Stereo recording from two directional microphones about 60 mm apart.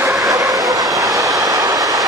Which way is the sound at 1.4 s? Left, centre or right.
Right.